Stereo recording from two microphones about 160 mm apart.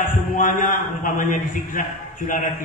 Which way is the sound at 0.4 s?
55° left (ahead or behind).